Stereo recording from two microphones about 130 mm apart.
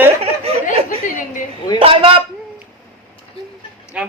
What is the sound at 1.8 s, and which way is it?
Speech, 45° right (ahead or behind).